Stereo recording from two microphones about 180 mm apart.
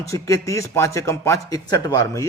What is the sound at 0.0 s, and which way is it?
A man's voice, 15° left (ahead or behind).